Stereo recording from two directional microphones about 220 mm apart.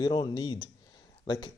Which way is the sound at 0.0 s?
20° left (ahead or behind).